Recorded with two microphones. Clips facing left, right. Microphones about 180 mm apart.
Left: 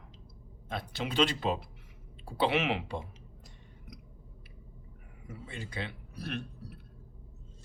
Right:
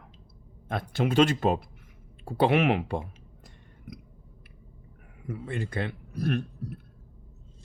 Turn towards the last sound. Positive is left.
turn(degrees=-50)  # may be behind; listen again after turning